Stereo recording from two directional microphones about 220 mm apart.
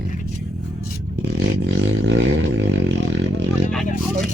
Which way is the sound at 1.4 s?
55° right (ahead or behind).